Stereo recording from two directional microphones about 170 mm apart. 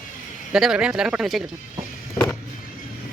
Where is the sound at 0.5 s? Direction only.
Centre (ahead or behind).